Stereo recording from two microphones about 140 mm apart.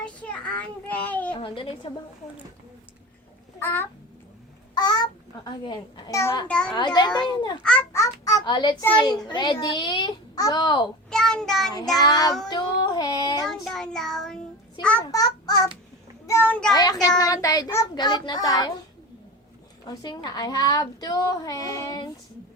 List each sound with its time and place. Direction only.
0.0 s child singing: 10° left (ahead or behind)
1.4 s a child's voice: 40° left (ahead or behind)
3.6 s a child's voice: 15° left (ahead or behind)
4.7 s a child's voice: 30° left (ahead or behind)
6.5 s a child's voice: 5° left (ahead or behind)
6.7 s a child's voice: 30° left (ahead or behind)
11.1 s child singing: 5° left (ahead or behind)
11.9 s a woman's voice: 30° left (ahead or behind)
13.5 s child singing: 5° left (ahead or behind)
15.0 s child singing: 25° left (ahead or behind)
16.7 s a woman's voice: 30° left (ahead or behind)
19.9 s a woman's voice: 30° left (ahead or behind)